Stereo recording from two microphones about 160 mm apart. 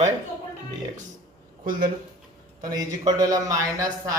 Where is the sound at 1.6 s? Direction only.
60° right (ahead or behind).